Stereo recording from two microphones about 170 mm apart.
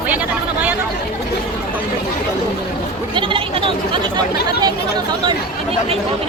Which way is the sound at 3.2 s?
30° right (ahead or behind).